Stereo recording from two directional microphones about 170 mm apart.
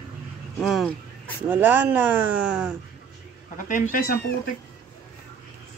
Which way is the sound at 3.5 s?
50° left (ahead or behind).